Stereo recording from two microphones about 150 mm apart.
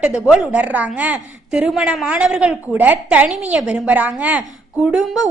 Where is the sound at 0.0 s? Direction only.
5° right (ahead or behind).